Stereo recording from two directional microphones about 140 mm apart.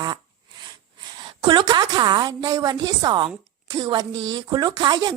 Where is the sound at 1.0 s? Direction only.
30° right (ahead or behind).